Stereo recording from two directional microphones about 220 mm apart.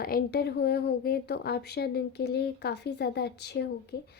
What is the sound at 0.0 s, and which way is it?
A woman's voice, 45° left (ahead or behind).